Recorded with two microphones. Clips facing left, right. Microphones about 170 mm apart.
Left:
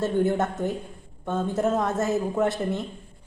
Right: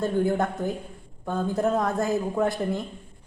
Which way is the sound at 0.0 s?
Centre (ahead or behind).